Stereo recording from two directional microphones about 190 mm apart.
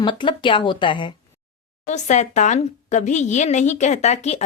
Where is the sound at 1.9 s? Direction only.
40° left (ahead or behind).